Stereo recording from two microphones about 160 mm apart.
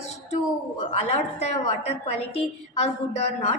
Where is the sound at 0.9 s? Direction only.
45° left (ahead or behind).